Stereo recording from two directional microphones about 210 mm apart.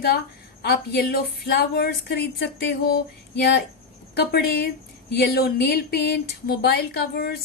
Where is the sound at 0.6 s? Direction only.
50° left (ahead or behind).